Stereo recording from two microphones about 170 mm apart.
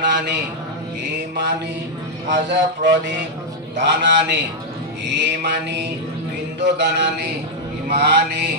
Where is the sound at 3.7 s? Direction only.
90° right.